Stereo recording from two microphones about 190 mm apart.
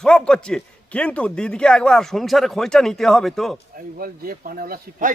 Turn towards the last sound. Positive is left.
turn(degrees=-45)  # may be behind; listen again after turning